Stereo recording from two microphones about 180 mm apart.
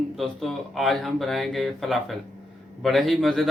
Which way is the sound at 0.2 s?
Centre (ahead or behind).